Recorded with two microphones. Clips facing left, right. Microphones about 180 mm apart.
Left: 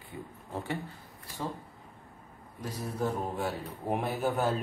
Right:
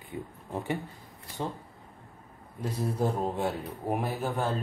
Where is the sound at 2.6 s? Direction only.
25° right (ahead or behind).